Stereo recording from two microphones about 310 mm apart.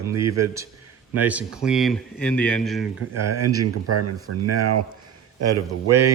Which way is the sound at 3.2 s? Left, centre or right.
Right.